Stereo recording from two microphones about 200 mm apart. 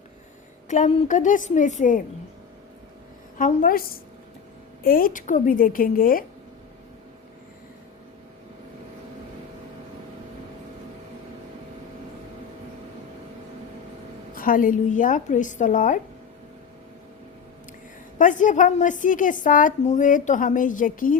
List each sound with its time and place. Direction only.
0.7 s a woman's voice: 35° left (ahead or behind)
3.3 s a woman's voice: 40° left (ahead or behind)
14.3 s a woman's voice: 45° left (ahead or behind)
18.2 s a woman's voice: 40° left (ahead or behind)